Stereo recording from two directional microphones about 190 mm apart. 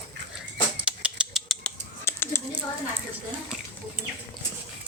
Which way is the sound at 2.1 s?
15° left (ahead or behind).